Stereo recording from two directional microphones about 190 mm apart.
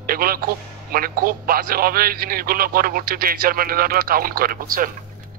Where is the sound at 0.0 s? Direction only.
50° right (ahead or behind).